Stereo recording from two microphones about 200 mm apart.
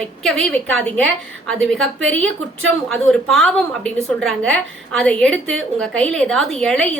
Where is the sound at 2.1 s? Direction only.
80° right.